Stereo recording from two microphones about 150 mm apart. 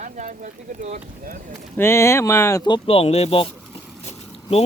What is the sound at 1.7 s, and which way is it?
Speech, 15° left (ahead or behind).